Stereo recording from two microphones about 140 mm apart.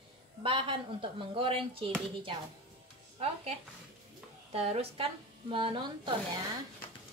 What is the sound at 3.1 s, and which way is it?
Speech, 45° right (ahead or behind).